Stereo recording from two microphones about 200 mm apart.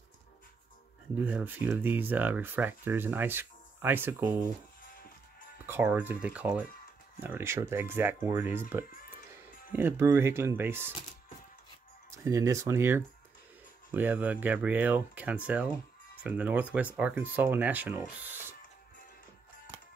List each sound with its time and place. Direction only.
1.1 s speech: 10° right (ahead or behind)
5.7 s speech: 10° right (ahead or behind)
12.1 s speech: 15° right (ahead or behind)